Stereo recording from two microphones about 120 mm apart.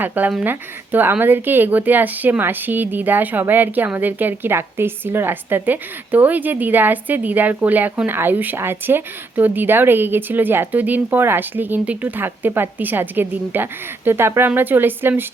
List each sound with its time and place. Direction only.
0.0 s speech: 15° right (ahead or behind)